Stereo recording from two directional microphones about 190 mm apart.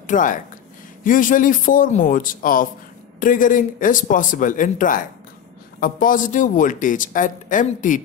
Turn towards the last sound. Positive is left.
turn(degrees=45)  # may be behind; listen again after turning